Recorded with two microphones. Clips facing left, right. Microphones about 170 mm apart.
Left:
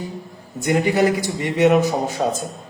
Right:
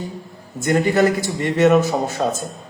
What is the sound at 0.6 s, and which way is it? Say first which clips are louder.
A man's voice: right 1 dB; 15° left (ahead or behind).